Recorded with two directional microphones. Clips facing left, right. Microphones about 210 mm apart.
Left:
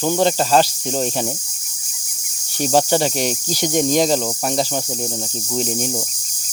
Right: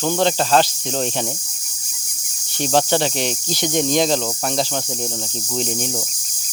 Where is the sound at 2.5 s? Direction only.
10° left (ahead or behind).